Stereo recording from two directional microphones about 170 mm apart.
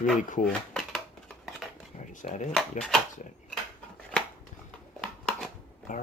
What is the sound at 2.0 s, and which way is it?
Dishes, 50° left (ahead or behind).